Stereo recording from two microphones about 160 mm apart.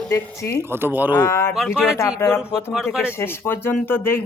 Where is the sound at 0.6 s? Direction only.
15° right (ahead or behind).